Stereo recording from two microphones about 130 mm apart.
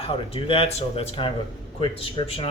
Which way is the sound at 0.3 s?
45° left (ahead or behind).